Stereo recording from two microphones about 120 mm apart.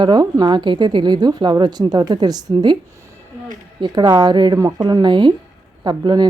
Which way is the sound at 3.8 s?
35° right (ahead or behind).